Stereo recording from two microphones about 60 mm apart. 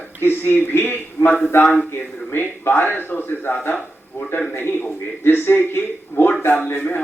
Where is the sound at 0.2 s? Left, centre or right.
Left.